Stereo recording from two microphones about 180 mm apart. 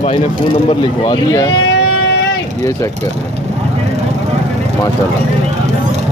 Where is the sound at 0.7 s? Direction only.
25° left (ahead or behind).